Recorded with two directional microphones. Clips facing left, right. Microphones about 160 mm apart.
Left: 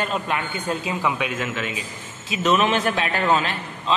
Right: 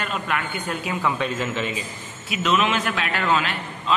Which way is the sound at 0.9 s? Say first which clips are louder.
Even; 10° left (ahead or behind).